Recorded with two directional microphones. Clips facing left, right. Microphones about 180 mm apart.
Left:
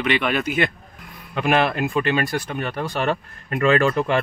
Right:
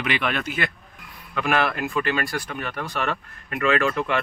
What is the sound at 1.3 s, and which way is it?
Speech, 25° left (ahead or behind).